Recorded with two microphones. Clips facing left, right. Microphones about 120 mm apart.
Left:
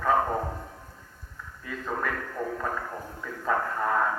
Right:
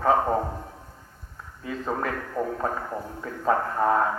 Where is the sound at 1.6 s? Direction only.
25° right (ahead or behind).